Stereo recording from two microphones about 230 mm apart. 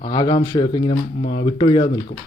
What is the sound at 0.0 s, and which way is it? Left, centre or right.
A man's voice, centre.